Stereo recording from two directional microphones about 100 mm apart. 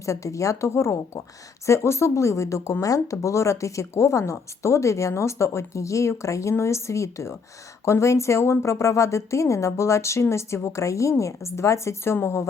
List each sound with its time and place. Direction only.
0.0 s a woman's voice: 30° left (ahead or behind)